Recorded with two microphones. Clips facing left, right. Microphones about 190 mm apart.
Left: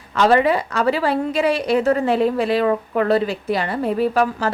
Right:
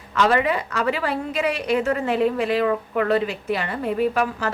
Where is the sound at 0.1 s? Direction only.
35° left (ahead or behind).